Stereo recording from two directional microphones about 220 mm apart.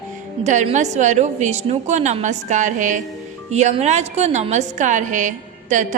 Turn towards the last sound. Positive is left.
turn(degrees=-35)  # may be behind; listen again after turning